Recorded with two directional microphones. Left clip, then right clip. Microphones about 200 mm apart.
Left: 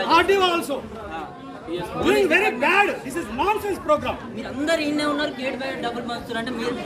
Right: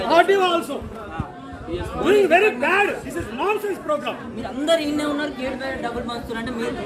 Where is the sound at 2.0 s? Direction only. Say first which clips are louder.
Right 3 dB; 25° left (ahead or behind).